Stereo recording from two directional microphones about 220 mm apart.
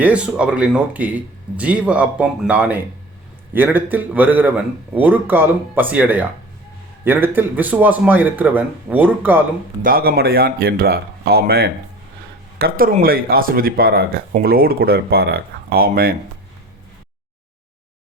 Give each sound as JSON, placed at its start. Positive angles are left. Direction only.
{"t": 0.0, "sound": "a man's voice", "side_deg": -5}
{"t": 9.8, "sound": "speech", "side_deg": -40}